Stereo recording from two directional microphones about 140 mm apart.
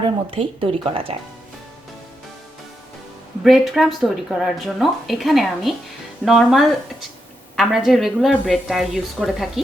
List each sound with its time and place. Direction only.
0.0 s a woman's voice: 40° right (ahead or behind)
3.4 s speech: centre (ahead or behind)